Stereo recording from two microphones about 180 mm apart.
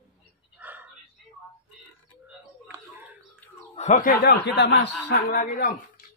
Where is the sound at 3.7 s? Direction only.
40° left (ahead or behind).